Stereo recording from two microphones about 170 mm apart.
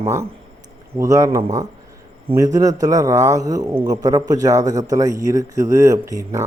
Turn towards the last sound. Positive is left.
turn(degrees=-20)  # may be behind; listen again after turning